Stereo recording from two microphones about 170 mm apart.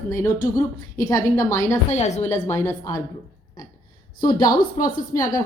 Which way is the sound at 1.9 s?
40° left (ahead or behind).